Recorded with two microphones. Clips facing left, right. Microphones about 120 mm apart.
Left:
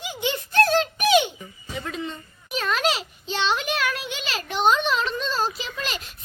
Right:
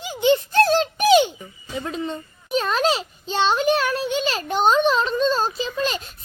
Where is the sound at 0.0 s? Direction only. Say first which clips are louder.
Right 10 dB; 30° right (ahead or behind).